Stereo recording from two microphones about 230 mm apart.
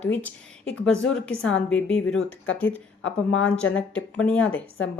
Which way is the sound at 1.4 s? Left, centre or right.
Centre.